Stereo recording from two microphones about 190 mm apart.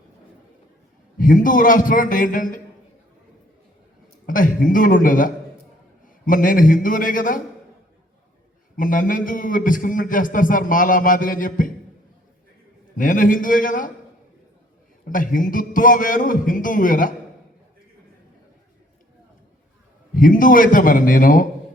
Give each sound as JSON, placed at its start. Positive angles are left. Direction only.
{"t": 1.2, "sound": "a man's voice", "side_deg": 45}
{"t": 4.3, "sound": "a man's voice", "side_deg": 45}
{"t": 8.7, "sound": "a man's voice", "side_deg": 45}
{"t": 13.0, "sound": "a man's voice", "side_deg": 45}
{"t": 15.0, "sound": "a man's voice", "side_deg": 45}
{"t": 20.1, "sound": "a man's voice", "side_deg": 45}